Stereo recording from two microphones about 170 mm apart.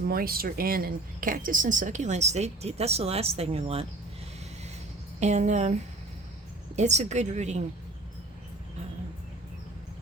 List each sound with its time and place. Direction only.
0.1 s speech: 60° right (ahead or behind); by 3.8 s 35° right (ahead or behind)
5.2 s speech: 45° right (ahead or behind)
6.7 s speech: 40° right (ahead or behind)